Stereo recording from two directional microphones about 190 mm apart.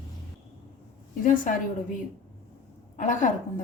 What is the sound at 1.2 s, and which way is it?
Speech, 45° left (ahead or behind).